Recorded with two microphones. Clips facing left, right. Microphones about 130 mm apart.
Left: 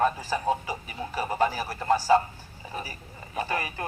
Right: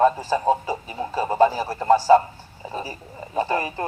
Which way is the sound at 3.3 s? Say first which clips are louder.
Right 7 dB; 30° right (ahead or behind).